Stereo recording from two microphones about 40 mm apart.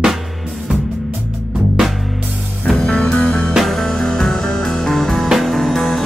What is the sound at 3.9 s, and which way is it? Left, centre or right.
Music, centre.